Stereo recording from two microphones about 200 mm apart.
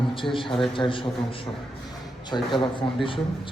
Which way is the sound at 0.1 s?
25° left (ahead or behind).